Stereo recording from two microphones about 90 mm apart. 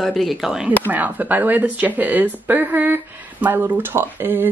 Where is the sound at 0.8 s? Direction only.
20° right (ahead or behind).